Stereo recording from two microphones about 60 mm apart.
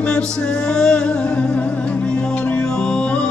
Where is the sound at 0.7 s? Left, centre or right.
Centre.